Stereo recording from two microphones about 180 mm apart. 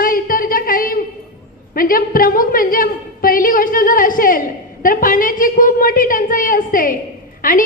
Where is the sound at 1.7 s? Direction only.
55° left (ahead or behind).